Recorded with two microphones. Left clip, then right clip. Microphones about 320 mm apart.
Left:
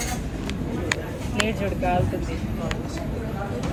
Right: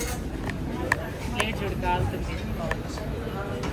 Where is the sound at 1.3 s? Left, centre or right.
Centre.